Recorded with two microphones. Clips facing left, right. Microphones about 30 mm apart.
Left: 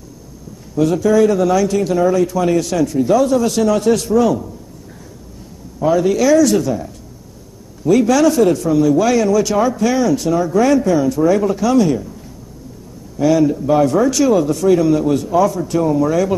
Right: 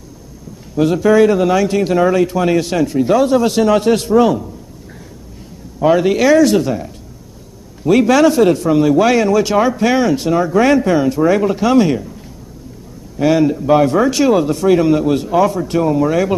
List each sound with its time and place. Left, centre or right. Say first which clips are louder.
0.7 s speech: right 2 dB; right
5.9 s speech: right 2 dB; right
7.8 s speech: right 2 dB; right
13.2 s speech: right 1 dB; right